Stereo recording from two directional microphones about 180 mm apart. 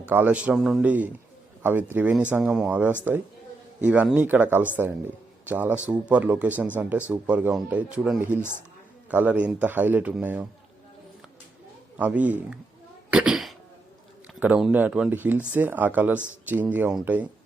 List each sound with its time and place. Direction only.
0.1 s a man's voice: 10° right (ahead or behind)
11.9 s speech: 10° right (ahead or behind)
13.1 s cough: 5° right (ahead or behind)
14.3 s speech: 10° right (ahead or behind)